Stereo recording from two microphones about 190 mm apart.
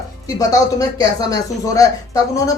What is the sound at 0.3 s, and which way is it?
Speech, 20° left (ahead or behind).